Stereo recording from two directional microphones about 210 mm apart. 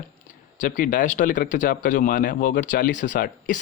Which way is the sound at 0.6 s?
40° left (ahead or behind).